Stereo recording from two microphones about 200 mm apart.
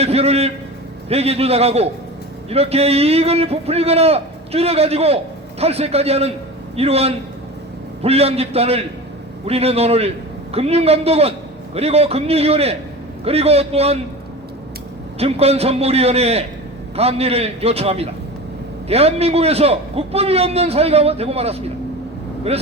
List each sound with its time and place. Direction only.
0.0 s a man's voice: 30° right (ahead or behind)
15.2 s a man's voice: 30° right (ahead or behind)